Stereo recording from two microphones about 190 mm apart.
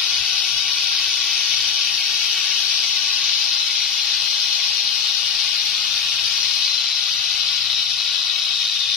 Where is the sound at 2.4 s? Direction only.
Centre (ahead or behind).